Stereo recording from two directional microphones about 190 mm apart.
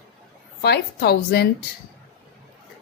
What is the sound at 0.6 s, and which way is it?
Speech, 55° left (ahead or behind).